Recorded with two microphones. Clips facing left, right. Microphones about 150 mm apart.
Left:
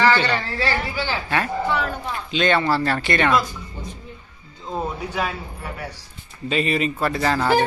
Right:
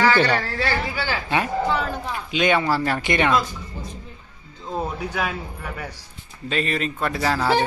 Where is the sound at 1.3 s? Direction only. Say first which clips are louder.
Right 1 dB; 15° right (ahead or behind).